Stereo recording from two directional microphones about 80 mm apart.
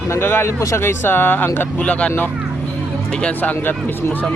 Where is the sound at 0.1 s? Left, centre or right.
Left; by 3.5 s centre.